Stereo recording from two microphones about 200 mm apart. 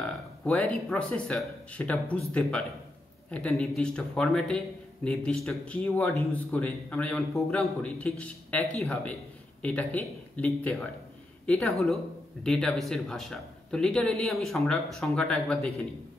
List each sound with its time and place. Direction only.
0.0 s a man's voice: 5° left (ahead or behind)